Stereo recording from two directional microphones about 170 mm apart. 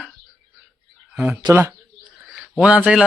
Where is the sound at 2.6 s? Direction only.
5° right (ahead or behind).